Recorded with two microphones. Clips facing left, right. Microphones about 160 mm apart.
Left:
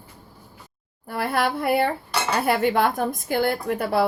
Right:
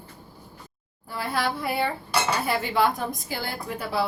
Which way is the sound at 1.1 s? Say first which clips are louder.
Left 4 dB; 60° left (ahead or behind).